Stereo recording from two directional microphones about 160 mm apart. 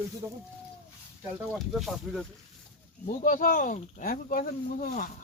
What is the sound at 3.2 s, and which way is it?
Speech, 60° left (ahead or behind).